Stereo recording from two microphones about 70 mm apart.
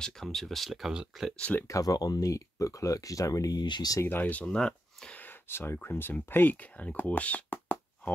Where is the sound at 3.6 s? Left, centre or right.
Left.